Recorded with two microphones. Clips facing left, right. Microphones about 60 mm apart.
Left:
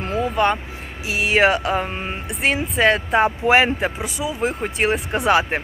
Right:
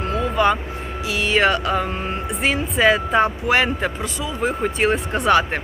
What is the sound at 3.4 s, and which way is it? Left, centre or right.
Speech, left.